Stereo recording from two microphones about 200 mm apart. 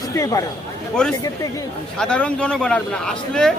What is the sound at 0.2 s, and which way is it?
Speech, 15° left (ahead or behind).